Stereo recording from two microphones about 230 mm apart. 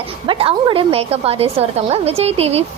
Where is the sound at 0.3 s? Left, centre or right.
Right.